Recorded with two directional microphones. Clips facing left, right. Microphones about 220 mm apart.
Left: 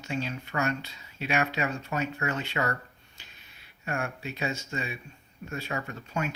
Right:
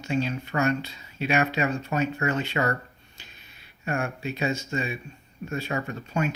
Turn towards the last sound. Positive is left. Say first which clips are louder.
# right 5 dB
turn(degrees=-30)  # may be behind; listen again after turning